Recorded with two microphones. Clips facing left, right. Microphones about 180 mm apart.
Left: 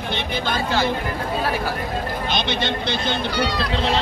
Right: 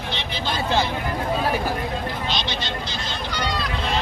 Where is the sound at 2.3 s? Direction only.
55° left (ahead or behind).